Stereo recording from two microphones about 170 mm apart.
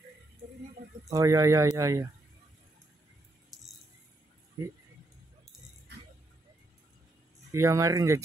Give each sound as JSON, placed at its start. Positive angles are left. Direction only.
{"t": 1.1, "sound": "speech", "side_deg": -20}
{"t": 7.5, "sound": "speech", "side_deg": -15}